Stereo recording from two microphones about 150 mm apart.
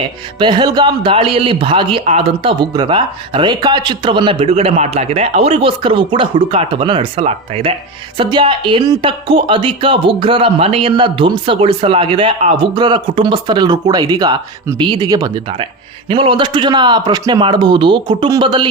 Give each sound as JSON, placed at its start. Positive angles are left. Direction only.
{"t": 0.3, "sound": "speech", "side_deg": -30}